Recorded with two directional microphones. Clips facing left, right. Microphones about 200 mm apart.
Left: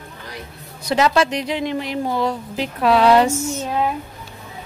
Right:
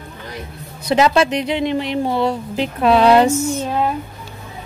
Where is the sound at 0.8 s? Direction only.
25° right (ahead or behind).